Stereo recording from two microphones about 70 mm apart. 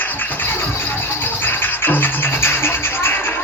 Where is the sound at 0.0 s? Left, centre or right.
Left.